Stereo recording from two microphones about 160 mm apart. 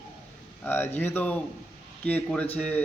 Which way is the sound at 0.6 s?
15° left (ahead or behind).